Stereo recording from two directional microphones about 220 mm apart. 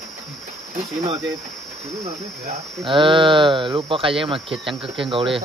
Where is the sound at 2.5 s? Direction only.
25° right (ahead or behind).